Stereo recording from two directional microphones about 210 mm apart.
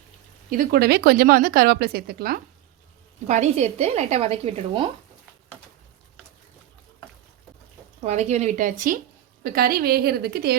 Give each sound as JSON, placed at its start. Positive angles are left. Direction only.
{"t": 0.5, "sound": "a woman's voice", "side_deg": -45}
{"t": 3.2, "sound": "speech", "side_deg": -35}
{"t": 8.0, "sound": "a woman's voice", "side_deg": -35}